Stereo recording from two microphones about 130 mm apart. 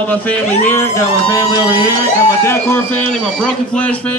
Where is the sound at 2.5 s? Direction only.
15° left (ahead or behind).